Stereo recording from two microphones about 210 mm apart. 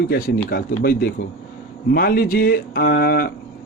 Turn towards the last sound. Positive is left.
turn(degrees=50)  # may be behind; listen again after turning